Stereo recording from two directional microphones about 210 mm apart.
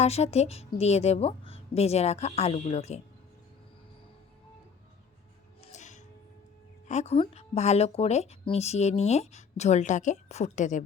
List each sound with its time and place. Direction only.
0.0 s speech: 30° left (ahead or behind)
5.7 s music: 35° left (ahead or behind)
6.8 s speech: 30° left (ahead or behind)